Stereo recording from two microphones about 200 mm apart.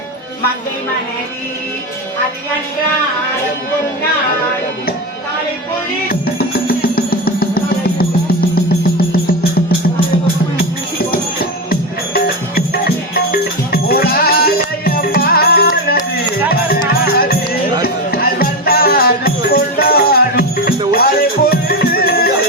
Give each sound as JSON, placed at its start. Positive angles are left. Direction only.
{"t": 6.1, "sound": "music", "side_deg": 50}
{"t": 17.1, "sound": "music", "side_deg": 50}